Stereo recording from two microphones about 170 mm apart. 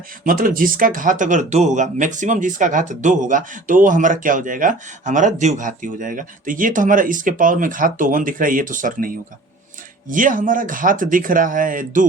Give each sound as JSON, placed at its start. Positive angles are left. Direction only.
{"t": 0.3, "sound": "speech", "side_deg": -55}